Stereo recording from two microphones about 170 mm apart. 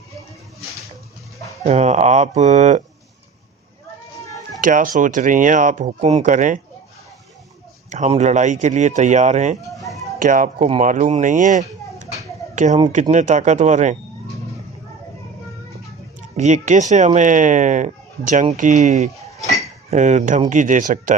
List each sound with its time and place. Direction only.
1.6 s speech: 40° right (ahead or behind)
4.6 s speech: 55° right (ahead or behind)
7.9 s speech: 45° right (ahead or behind)
9.7 s a sound: centre (ahead or behind)
10.2 s speech: 50° right (ahead or behind)
16.4 s speech: 45° right (ahead or behind)